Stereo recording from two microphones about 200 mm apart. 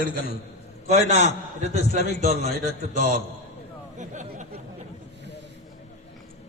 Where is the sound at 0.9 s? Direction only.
35° right (ahead or behind).